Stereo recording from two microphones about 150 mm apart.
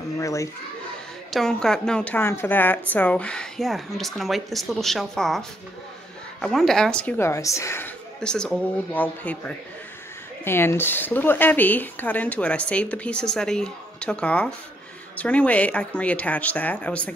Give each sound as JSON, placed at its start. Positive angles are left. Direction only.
{"t": 0.2, "sound": "speech", "side_deg": 20}
{"t": 1.3, "sound": "speech", "side_deg": 5}
{"t": 6.4, "sound": "speech", "side_deg": 0}
{"t": 8.2, "sound": "speech", "side_deg": 5}
{"t": 10.4, "sound": "speech", "side_deg": 15}